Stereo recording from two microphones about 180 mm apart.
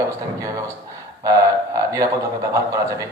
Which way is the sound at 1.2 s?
20° right (ahead or behind).